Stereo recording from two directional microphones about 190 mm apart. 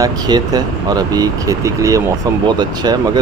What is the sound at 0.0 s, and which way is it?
Speech, 20° right (ahead or behind).